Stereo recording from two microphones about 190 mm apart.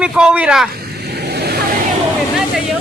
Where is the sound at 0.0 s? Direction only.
5° right (ahead or behind).